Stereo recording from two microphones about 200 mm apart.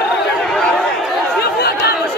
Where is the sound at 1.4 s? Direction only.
50° left (ahead or behind).